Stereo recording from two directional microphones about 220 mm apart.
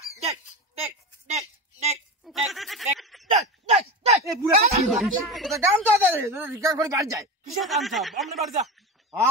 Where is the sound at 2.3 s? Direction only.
Centre (ahead or behind).